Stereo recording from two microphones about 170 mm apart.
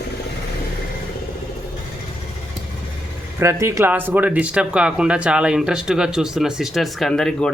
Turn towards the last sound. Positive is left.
turn(degrees=5)  # may be behind; listen again after turning